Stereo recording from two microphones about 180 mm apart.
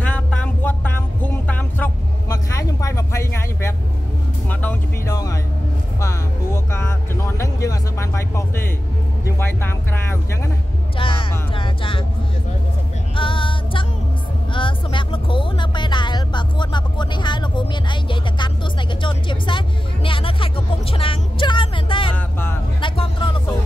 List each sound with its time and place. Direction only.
0.0 s music: 5° left (ahead or behind)
2.2 s vehicle: 20° left (ahead or behind)
4.5 s music: 10° left (ahead or behind)
11.0 s music: 30° left (ahead or behind)
13.1 s music: 30° left (ahead or behind)
22.1 s vehicle: 10° left (ahead or behind)
22.8 s music: 25° left (ahead or behind)